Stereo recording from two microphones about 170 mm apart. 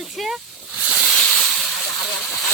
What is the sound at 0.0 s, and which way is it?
Snake, centre (ahead or behind).